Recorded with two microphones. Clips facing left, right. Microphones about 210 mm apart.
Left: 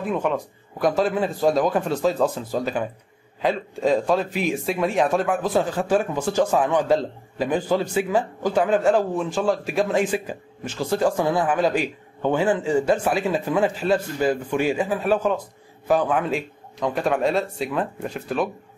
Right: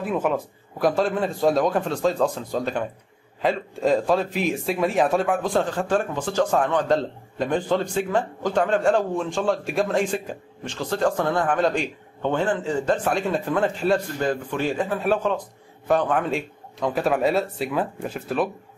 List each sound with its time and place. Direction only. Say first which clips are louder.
0.0 s a man's voice: even; 5° right (ahead or behind)